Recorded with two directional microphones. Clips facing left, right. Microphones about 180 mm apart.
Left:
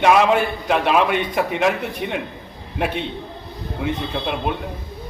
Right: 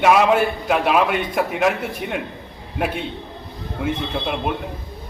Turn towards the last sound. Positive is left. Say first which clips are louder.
# even
turn(degrees=0)  # may be behind; listen again after turning